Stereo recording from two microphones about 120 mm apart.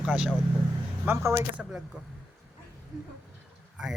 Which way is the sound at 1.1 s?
20° right (ahead or behind).